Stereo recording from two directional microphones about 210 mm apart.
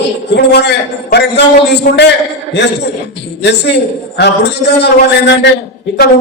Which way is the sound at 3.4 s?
55° left (ahead or behind).